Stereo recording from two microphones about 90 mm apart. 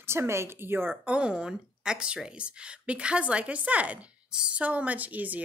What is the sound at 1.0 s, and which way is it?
Speech, 15° right (ahead or behind).